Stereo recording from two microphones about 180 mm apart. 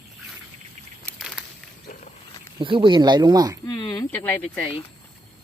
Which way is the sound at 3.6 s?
20° left (ahead or behind).